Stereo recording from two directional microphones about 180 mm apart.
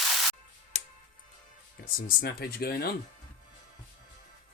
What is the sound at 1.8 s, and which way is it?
Speech, 55° left (ahead or behind).